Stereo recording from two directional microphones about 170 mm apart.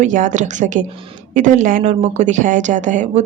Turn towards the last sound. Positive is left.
turn(degrees=-45)  # may be behind; listen again after turning